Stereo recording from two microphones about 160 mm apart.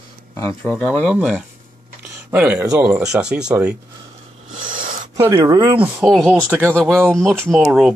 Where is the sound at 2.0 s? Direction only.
10° right (ahead or behind).